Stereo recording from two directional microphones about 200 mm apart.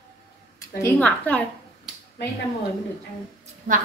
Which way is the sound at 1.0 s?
10° left (ahead or behind).